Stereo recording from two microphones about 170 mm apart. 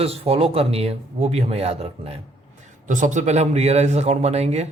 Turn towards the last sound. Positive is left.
turn(degrees=-40)  # may be behind; listen again after turning